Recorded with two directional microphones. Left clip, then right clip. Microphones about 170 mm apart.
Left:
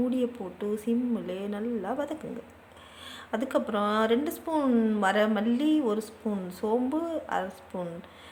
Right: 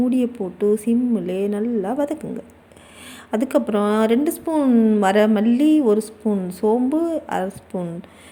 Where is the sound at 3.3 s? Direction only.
30° right (ahead or behind).